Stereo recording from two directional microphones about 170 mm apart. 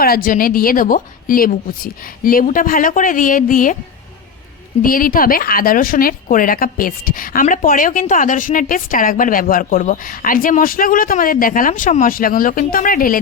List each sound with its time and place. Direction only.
0.0 s speech: 60° left (ahead or behind)
4.8 s speech: 55° left (ahead or behind)